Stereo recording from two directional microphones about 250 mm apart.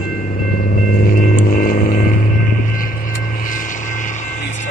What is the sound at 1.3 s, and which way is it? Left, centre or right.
Vehicle, left.